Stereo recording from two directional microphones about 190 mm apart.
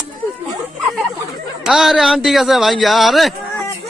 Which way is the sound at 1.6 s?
Centre (ahead or behind).